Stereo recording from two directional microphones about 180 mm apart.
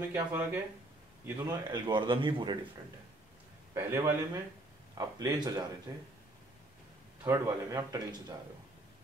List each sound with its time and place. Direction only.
0.1 s a man's voice: 10° right (ahead or behind); by 2.5 s 25° right (ahead or behind)
3.7 s a man's voice: 15° right (ahead or behind)
7.2 s a man's voice: 15° right (ahead or behind)